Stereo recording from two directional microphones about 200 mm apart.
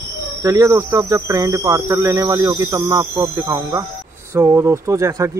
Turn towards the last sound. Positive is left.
turn(degrees=-15)  # may be behind; listen again after turning